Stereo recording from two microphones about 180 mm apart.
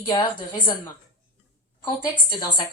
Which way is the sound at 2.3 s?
25° left (ahead or behind).